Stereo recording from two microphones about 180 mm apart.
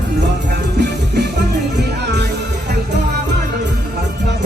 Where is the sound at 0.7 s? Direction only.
70° right (ahead or behind).